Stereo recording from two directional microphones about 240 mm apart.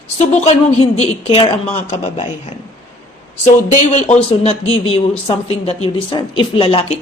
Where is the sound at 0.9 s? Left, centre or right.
Left.